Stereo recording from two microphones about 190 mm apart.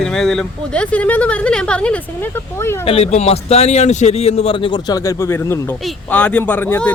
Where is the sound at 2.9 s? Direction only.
30° left (ahead or behind).